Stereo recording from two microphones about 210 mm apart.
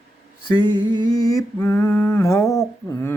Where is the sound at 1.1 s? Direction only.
15° left (ahead or behind).